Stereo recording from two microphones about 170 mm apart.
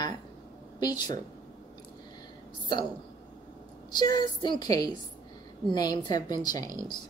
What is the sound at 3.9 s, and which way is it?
Speech, 25° left (ahead or behind).